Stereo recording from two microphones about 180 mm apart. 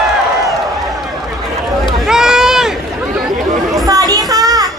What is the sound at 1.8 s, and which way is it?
Run, 5° right (ahead or behind).